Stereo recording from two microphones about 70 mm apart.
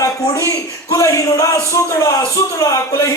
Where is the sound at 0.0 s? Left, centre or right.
Left.